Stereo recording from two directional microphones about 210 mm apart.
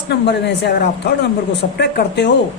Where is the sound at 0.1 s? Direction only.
55° left (ahead or behind).